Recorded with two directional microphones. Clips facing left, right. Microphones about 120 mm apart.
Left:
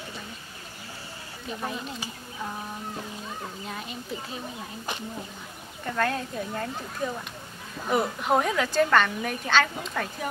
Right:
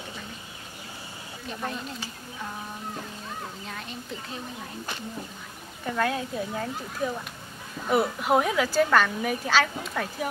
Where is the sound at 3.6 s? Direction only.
5° left (ahead or behind).